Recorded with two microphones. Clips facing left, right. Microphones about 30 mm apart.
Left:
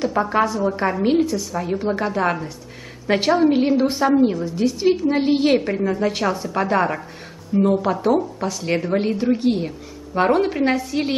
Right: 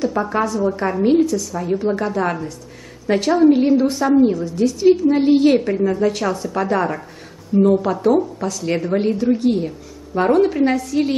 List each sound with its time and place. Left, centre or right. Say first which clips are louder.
0.1 s a woman's voice: left 1 dB; centre
9.3 s a woman's voice: right 2 dB; left